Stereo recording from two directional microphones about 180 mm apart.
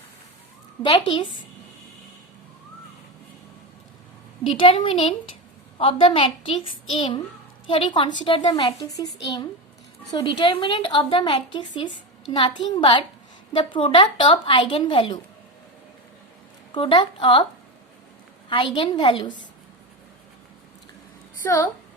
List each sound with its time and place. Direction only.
0.8 s a woman's voice: 25° left (ahead or behind)
4.4 s a woman's voice: 30° left (ahead or behind)
16.7 s a woman's voice: 25° left (ahead or behind)
18.4 s a woman's voice: 25° left (ahead or behind)
21.4 s a woman's voice: 15° left (ahead or behind)